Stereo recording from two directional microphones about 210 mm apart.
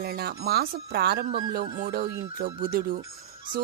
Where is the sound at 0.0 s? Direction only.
50° right (ahead or behind).